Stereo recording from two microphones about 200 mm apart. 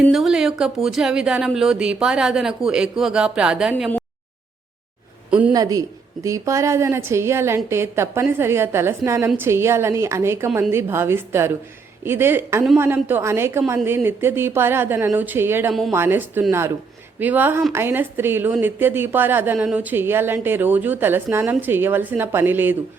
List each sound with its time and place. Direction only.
0.0 s speech: centre (ahead or behind)
5.3 s a woman's voice: 5° right (ahead or behind)
5.5 s a woman's voice: 15° right (ahead or behind)